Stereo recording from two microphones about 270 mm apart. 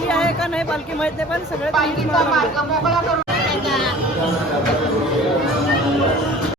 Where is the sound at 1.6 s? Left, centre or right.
Centre.